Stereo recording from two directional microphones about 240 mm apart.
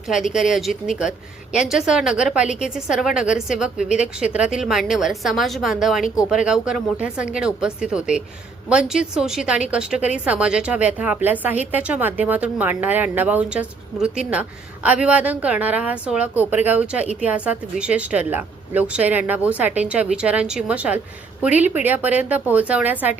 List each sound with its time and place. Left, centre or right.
0.3 s a woman's voice: centre